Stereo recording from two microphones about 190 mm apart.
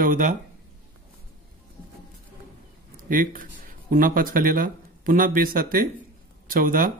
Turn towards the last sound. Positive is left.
turn(degrees=-45)  # may be behind; listen again after turning